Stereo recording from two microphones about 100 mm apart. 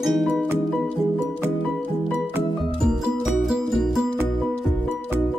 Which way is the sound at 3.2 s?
Centre (ahead or behind).